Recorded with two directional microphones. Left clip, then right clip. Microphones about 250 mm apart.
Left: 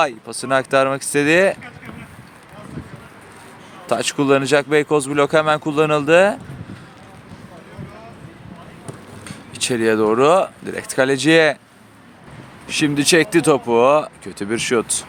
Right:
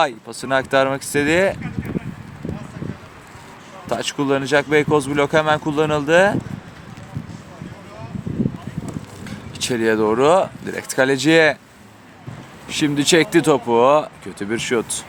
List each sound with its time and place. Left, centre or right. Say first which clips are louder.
0.0 s speech: even; centre
3.8 s speech: left 4 dB; centre
9.2 s speech: left 2 dB; centre
12.6 s speech: left 1 dB; centre